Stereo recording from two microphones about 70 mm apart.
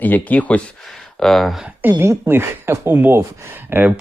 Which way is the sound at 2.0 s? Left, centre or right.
Right.